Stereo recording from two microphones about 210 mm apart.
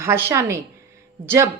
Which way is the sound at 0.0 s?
10° right (ahead or behind).